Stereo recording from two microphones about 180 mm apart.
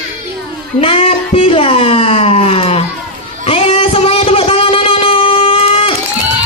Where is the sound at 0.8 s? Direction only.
30° left (ahead or behind).